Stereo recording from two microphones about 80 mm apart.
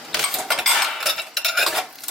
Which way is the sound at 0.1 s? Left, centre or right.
Centre.